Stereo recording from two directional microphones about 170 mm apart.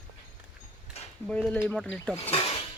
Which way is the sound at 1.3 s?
5° left (ahead or behind).